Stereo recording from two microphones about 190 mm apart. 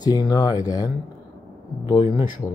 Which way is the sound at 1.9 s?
20° left (ahead or behind).